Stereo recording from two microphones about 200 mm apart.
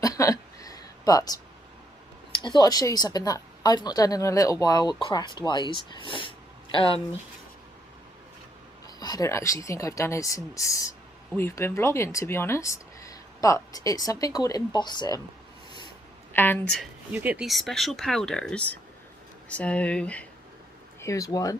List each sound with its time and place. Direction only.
0.0 s a sound: 15° left (ahead or behind)
2.4 s speech: 20° left (ahead or behind)
9.0 s speech: 20° left (ahead or behind)
16.3 s speech: 10° left (ahead or behind)
16.7 s speech: 5° right (ahead or behind); by 21.5 s 15° left (ahead or behind)